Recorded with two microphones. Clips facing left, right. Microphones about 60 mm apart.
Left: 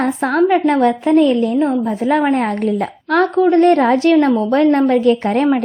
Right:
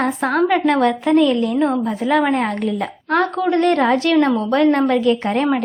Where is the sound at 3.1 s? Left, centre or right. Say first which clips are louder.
Left 3 dB; right.